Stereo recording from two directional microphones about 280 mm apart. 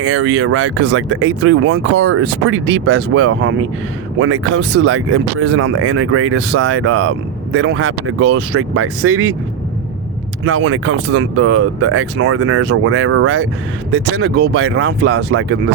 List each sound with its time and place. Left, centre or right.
0.0 s speech: right
10.4 s speech: right